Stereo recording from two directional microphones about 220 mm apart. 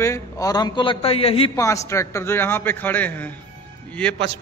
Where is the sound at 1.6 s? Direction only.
15° left (ahead or behind).